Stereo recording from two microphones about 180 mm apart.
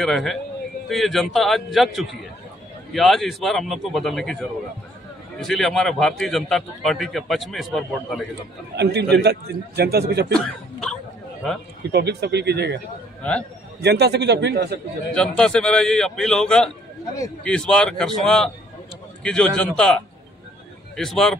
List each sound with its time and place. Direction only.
0.0 s a man's voice: centre (ahead or behind)
9.1 s a man's voice: 65° right (ahead or behind)
10.3 s hiccup: 5° left (ahead or behind)
11.9 s a man's voice: 65° right (ahead or behind)
13.2 s a man's voice: 5° left (ahead or behind)
13.7 s a man's voice: 65° right (ahead or behind)
15.1 s a man's voice: 5° left (ahead or behind)